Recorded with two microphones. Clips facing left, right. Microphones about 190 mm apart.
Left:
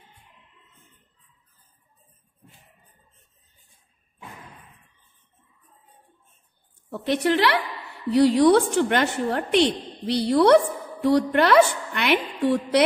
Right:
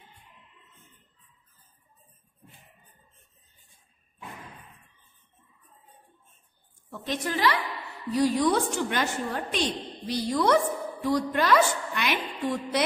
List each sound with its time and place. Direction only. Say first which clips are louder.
7.0 s a woman's voice: left 7 dB; 70° left (ahead or behind)